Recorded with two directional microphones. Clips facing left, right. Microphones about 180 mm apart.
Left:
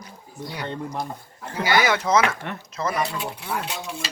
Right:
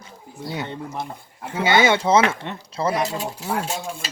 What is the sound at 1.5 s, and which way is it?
Speech, 25° right (ahead or behind).